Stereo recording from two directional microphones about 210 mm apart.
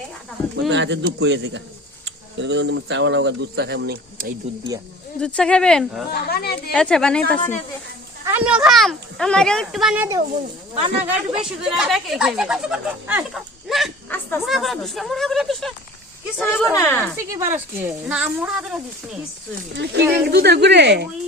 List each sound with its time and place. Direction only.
0.7 s speech: 55° right (ahead or behind)
4.5 s speech: 30° right (ahead or behind)
5.2 s speech: 5° left (ahead or behind)
6.1 s speech: 45° left (ahead or behind)
6.7 s speech: 5° left (ahead or behind)
8.2 s a woman's voice: 10° right (ahead or behind); by 17.1 s 10° left (ahead or behind)
17.2 s speech: 10° right (ahead or behind)
19.7 s speech: 50° right (ahead or behind)